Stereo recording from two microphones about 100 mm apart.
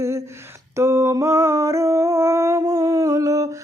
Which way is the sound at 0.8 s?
30° right (ahead or behind).